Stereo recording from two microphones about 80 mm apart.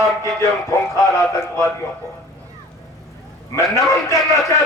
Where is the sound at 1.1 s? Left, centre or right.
Left.